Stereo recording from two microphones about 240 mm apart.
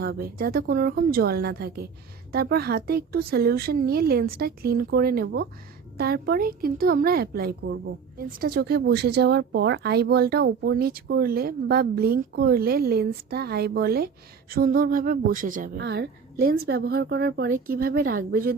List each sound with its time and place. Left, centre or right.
0.0 s speech: right